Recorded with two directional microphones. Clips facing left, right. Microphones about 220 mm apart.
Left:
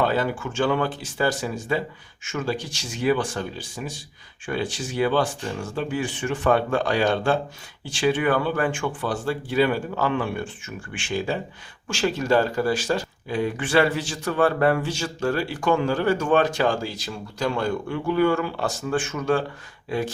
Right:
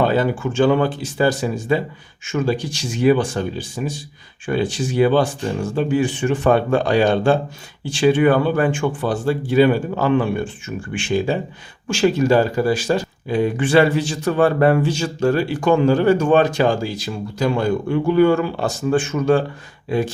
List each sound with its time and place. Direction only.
0.0 s speech: 20° right (ahead or behind)